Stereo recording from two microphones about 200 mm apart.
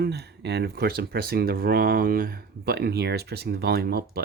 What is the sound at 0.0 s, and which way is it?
Speech, 55° right (ahead or behind).